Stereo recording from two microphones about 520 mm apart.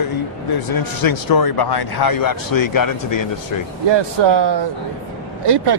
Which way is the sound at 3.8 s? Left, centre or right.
Right.